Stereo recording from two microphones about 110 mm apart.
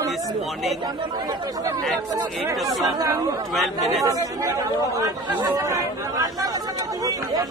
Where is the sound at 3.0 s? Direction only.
35° right (ahead or behind).